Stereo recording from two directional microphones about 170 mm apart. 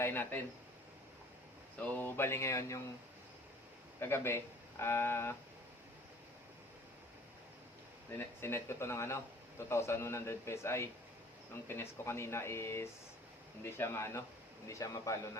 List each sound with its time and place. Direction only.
0.0 s speech: 10° left (ahead or behind)
1.8 s a man's voice: 10° left (ahead or behind)
4.0 s a man's voice: 15° left (ahead or behind)
8.2 s a man's voice: 15° left (ahead or behind)